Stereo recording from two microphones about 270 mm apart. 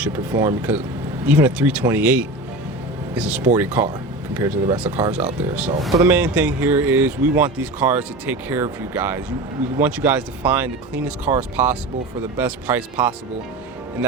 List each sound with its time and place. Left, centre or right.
0.0 s speech: centre